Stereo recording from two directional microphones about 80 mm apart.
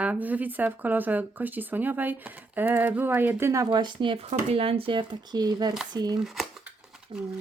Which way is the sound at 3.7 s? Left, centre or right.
Right.